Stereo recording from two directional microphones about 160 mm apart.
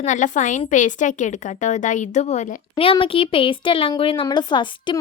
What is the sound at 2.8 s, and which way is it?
Speech, 35° left (ahead or behind).